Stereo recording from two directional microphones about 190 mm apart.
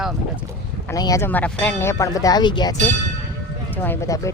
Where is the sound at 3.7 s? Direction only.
10° left (ahead or behind).